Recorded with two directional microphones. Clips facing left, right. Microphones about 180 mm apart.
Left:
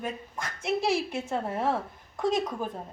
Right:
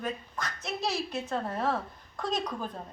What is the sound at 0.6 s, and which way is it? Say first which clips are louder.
A woman's voice: left 7 dB; 10° left (ahead or behind).